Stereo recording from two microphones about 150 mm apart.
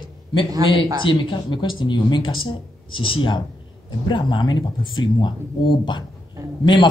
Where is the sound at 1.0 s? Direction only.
35° left (ahead or behind).